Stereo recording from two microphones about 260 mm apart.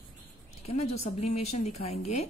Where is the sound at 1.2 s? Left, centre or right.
Left.